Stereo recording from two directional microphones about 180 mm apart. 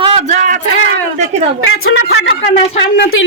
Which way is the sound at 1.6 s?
80° left.